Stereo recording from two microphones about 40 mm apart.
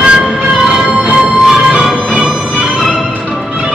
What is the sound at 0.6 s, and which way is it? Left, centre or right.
Music, centre.